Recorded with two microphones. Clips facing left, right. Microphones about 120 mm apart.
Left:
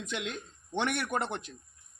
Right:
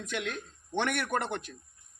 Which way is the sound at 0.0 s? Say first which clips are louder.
Right 1 dB; 20° left (ahead or behind).